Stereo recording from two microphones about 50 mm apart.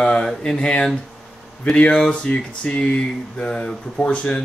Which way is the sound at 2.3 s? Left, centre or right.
Left.